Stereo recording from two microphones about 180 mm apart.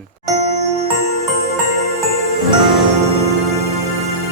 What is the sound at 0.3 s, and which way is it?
Music, 35° right (ahead or behind).